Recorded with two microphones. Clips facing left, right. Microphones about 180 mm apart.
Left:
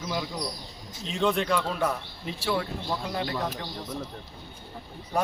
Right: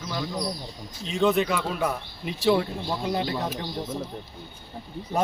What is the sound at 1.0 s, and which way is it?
Speech, centre (ahead or behind).